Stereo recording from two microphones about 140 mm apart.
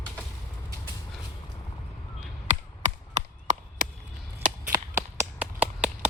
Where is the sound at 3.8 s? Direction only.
80° right.